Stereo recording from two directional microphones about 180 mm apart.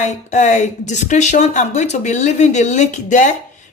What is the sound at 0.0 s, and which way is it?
Speech, 40° left (ahead or behind).